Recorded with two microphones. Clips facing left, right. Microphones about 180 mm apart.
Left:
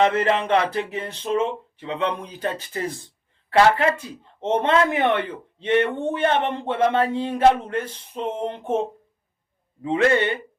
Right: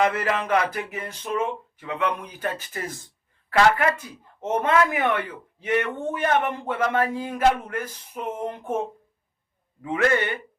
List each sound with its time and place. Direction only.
0.0 s speech: 25° left (ahead or behind)